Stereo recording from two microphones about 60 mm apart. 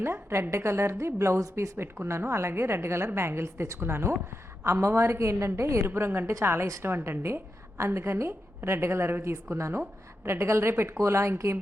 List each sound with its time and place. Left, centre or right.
0.0 s a woman's voice: right